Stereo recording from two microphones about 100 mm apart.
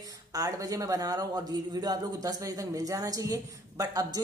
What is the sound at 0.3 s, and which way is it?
A man's voice, 35° right (ahead or behind).